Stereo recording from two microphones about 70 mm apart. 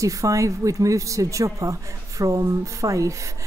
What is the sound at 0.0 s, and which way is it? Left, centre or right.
Speech, right.